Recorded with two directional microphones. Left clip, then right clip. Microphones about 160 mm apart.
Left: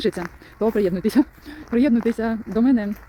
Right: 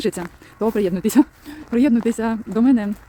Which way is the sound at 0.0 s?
10° right (ahead or behind).